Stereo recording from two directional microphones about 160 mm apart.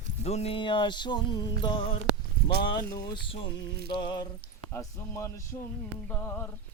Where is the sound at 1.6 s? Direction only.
30° left (ahead or behind).